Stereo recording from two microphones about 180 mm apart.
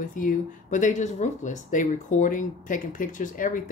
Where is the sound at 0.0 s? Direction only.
45° left (ahead or behind).